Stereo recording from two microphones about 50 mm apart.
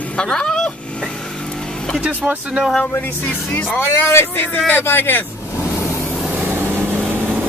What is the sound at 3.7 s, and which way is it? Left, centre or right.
Speech, left.